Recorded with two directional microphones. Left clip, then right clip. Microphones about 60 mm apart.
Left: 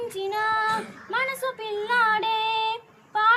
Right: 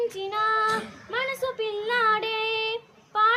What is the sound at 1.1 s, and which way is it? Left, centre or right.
Child singing, right.